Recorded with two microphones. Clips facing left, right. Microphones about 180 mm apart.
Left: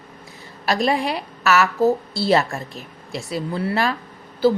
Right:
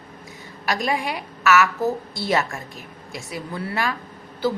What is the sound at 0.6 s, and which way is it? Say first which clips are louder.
A woman's voice: left 4 dB; 35° left (ahead or behind).